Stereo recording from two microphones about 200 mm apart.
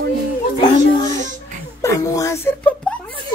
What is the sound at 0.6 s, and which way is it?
A child's voice, 20° left (ahead or behind).